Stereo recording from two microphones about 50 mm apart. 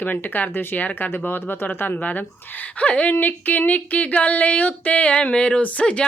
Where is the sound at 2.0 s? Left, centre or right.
Left.